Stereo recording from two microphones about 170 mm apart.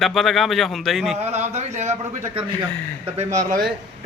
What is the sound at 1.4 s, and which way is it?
Speech, 40° right (ahead or behind).